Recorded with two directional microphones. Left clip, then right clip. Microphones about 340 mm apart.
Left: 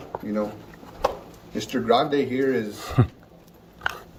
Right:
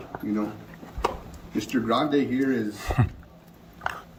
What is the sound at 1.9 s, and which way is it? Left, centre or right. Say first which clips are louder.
Speech: left 4 dB; centre.